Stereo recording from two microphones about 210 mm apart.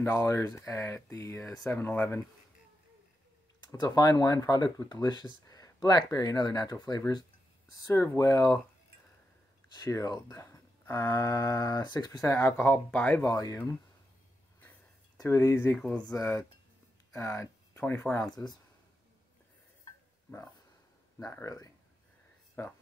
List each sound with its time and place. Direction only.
0.0 s speech: 15° left (ahead or behind)
3.8 s speech: 20° left (ahead or behind)
9.8 s speech: 15° left (ahead or behind)
15.1 s speech: 15° left (ahead or behind)
21.2 s speech: 15° left (ahead or behind)